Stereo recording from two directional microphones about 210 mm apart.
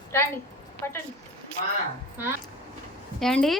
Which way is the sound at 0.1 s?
10° left (ahead or behind).